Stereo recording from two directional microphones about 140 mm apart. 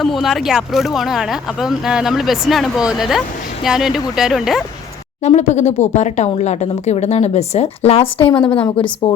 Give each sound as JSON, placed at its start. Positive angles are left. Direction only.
{"t": 0.0, "sound": "speech", "side_deg": 0}
{"t": 5.2, "sound": "speech", "side_deg": 55}
{"t": 8.6, "sound": "a woman's voice", "side_deg": 30}